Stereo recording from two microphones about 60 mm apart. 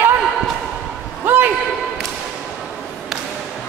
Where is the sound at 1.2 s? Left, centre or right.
Right.